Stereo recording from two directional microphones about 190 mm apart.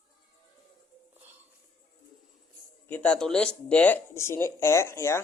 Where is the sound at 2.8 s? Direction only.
10° left (ahead or behind).